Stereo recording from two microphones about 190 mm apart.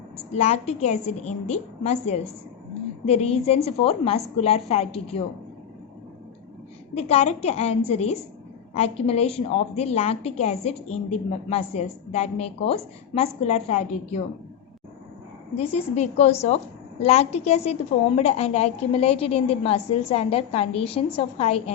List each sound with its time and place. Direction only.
0.3 s a woman's voice: 35° left (ahead or behind)
6.9 s a woman's voice: 35° left (ahead or behind)
15.5 s a woman's voice: 30° left (ahead or behind)